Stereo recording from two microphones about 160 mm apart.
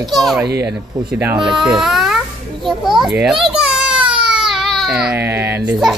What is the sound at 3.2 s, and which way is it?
Children playing, centre (ahead or behind).